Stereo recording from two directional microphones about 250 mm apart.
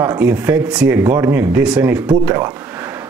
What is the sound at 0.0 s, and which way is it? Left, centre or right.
Speech, centre.